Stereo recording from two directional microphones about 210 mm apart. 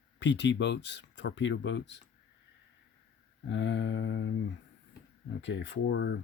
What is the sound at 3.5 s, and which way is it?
Speech, 60° left (ahead or behind).